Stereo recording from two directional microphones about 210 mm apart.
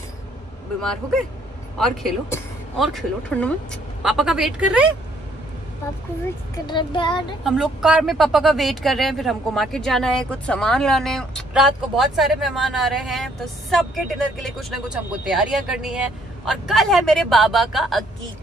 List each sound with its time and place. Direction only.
2.8 s speech: centre (ahead or behind)
6.2 s speech: 20° left (ahead or behind)
7.4 s speech: centre (ahead or behind)